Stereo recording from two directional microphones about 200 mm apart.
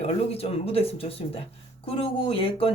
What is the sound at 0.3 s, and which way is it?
Speech, 30° left (ahead or behind).